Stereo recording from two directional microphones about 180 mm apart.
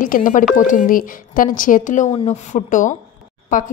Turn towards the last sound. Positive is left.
turn(degrees=45)  # may be behind; listen again after turning